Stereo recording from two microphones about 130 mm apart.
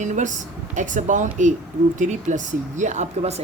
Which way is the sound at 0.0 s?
70° right (ahead or behind).